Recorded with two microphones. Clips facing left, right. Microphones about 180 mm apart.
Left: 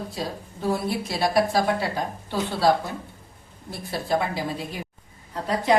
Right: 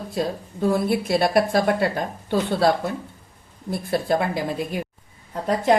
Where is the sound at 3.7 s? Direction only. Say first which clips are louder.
Right 4 dB; 55° right (ahead or behind).